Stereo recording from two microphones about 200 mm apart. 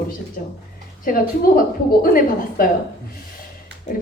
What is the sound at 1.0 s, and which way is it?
A woman's voice, 45° left (ahead or behind).